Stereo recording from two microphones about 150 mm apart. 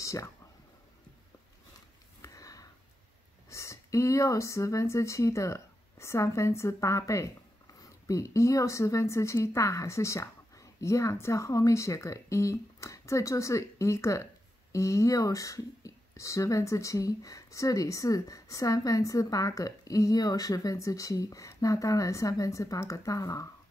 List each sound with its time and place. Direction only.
0.0 s a sound: 20° left (ahead or behind)
2.2 s sniff: 25° left (ahead or behind)
3.4 s speech: 20° left (ahead or behind)